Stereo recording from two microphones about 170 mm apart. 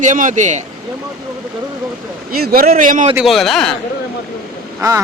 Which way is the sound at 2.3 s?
60° right (ahead or behind).